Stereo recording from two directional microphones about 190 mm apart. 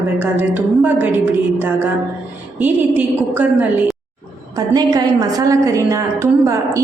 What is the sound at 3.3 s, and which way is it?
A woman's voice, 10° right (ahead or behind).